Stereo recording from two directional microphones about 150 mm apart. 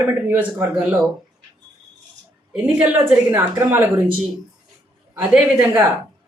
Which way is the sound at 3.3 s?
15° right (ahead or behind).